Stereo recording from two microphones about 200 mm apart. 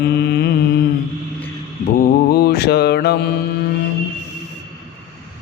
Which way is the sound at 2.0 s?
50° left (ahead or behind).